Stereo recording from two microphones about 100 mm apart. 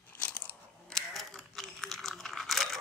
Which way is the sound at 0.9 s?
Centre (ahead or behind).